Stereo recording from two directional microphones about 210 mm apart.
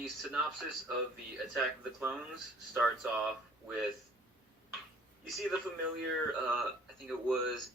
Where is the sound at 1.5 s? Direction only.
5° right (ahead or behind).